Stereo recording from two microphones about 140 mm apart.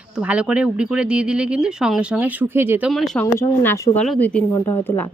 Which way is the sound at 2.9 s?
Centre (ahead or behind).